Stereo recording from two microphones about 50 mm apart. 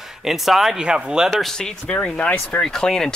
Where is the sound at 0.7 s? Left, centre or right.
Centre.